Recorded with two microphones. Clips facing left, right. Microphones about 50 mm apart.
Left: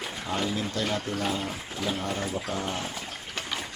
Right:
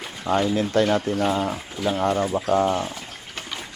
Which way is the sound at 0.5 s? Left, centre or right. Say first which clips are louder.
Right 9 dB; right.